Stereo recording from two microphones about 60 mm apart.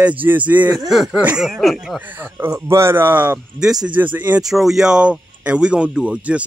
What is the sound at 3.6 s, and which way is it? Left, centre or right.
Speech, centre.